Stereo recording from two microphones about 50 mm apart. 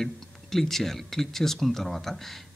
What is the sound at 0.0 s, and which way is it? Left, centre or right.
Speech, centre.